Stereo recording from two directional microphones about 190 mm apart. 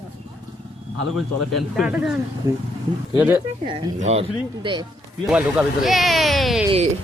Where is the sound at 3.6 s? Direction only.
30° right (ahead or behind).